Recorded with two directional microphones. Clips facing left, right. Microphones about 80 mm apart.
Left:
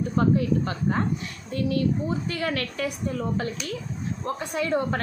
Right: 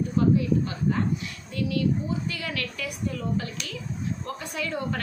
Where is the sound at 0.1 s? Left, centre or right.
Left.